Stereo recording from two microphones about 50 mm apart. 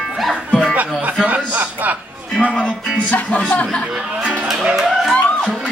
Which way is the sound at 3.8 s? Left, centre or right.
Centre.